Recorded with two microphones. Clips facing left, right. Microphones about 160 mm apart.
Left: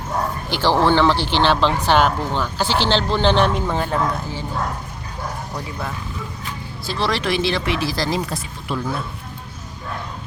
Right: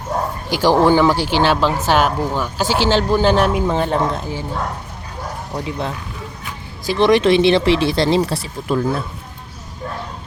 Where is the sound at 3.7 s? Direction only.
25° right (ahead or behind).